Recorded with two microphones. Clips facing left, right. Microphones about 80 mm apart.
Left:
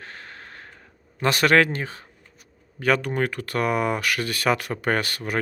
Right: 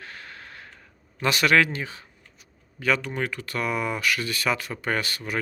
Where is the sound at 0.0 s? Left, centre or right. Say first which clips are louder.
Left 1 dB; left.